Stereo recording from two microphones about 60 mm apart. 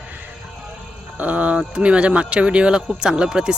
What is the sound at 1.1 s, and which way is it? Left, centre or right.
Speech, right.